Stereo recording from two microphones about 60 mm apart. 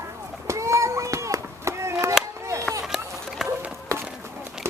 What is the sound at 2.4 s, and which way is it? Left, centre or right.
Chop, right.